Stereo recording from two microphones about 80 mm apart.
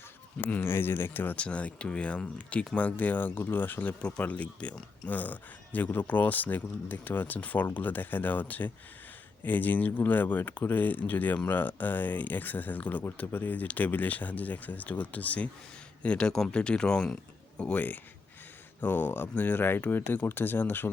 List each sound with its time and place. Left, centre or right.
0.3 s speech: centre
0.6 s speech: left